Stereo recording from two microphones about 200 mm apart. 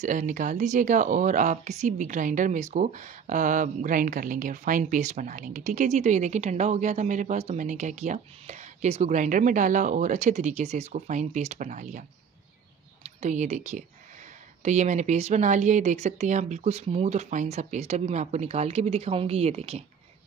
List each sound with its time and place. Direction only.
0.0 s speech: 40° right (ahead or behind)
13.0 s speech: 35° right (ahead or behind)